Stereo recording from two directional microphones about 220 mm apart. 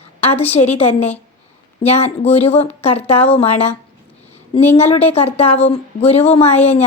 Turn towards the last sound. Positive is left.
turn(degrees=30)  # may be behind; listen again after turning